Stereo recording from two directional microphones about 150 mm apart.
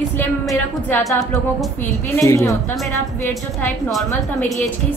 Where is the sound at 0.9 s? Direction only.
15° left (ahead or behind).